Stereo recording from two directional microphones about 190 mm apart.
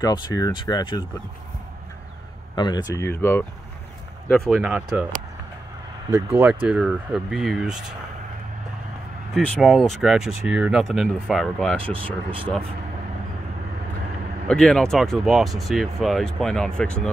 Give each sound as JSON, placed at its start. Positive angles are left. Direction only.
{"t": 0.0, "sound": "speech", "side_deg": 20}
{"t": 2.5, "sound": "speech", "side_deg": 20}
{"t": 4.3, "sound": "speech", "side_deg": -5}
{"t": 6.3, "sound": "speech", "side_deg": -10}
{"t": 9.3, "sound": "speech", "side_deg": 5}
{"t": 12.0, "sound": "speech", "side_deg": -25}
{"t": 14.5, "sound": "speech", "side_deg": 5}